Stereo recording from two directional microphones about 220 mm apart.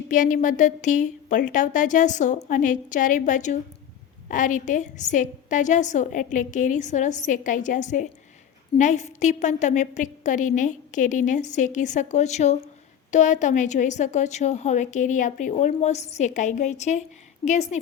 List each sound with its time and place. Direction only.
0.1 s a woman's voice: 35° left (ahead or behind)